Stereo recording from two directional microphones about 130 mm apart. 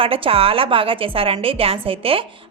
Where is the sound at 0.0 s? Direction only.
45° right (ahead or behind).